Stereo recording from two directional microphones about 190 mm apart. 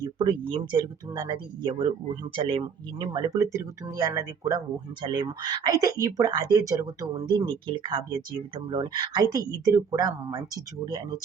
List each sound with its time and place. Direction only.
0.0 s speech: 25° right (ahead or behind)